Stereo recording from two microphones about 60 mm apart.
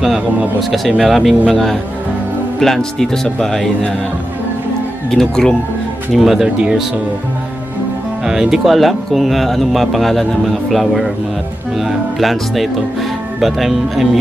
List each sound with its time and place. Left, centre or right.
0.6 s speech: centre
5.1 s speech: centre
6.1 s speech: centre
8.3 s speech: centre
12.2 s speech: centre